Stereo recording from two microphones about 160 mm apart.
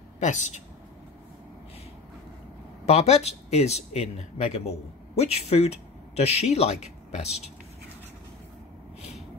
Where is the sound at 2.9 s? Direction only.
45° left (ahead or behind).